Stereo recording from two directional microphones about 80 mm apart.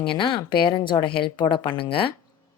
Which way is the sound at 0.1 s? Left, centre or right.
Left.